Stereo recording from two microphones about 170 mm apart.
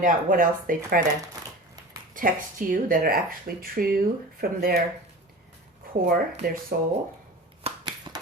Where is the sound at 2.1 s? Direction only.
55° right (ahead or behind).